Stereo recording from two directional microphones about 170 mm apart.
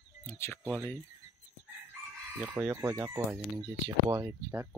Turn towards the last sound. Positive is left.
turn(degrees=-20)  # may be behind; listen again after turning